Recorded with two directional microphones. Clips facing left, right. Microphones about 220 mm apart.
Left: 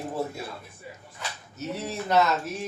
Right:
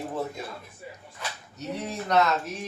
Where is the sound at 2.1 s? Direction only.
Centre (ahead or behind).